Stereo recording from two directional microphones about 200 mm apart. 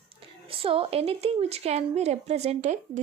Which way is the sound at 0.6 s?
30° right (ahead or behind).